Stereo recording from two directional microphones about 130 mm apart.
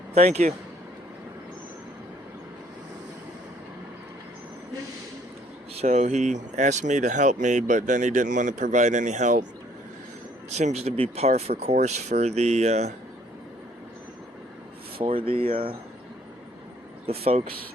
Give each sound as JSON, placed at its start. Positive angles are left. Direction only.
{"t": 0.1, "sound": "speech", "side_deg": -55}
{"t": 5.7, "sound": "speech", "side_deg": -60}
{"t": 10.5, "sound": "speech", "side_deg": -60}
{"t": 15.0, "sound": "speech", "side_deg": -45}
{"t": 17.1, "sound": "speech", "side_deg": -50}